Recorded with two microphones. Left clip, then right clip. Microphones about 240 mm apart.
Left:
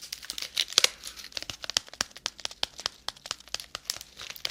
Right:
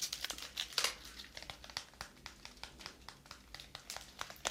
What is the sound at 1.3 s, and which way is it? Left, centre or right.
Crumpling, left.